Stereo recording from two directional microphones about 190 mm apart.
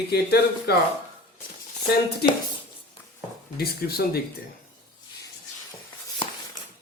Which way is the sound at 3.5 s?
55° left (ahead or behind).